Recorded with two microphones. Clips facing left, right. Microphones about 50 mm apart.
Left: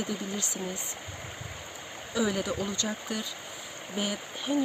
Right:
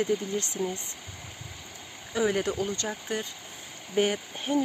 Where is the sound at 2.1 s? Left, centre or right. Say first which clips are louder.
Right 2 dB; right.